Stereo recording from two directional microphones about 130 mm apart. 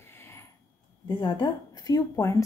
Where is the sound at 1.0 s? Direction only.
35° left (ahead or behind).